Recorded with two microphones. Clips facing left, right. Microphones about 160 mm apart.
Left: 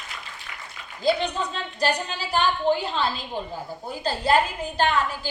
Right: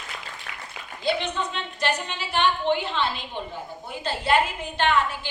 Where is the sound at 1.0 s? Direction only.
35° left (ahead or behind).